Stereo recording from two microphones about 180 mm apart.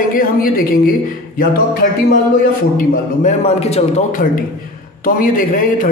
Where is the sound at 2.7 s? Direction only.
40° left (ahead or behind).